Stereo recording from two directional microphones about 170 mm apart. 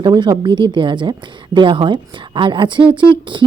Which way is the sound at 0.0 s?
25° right (ahead or behind).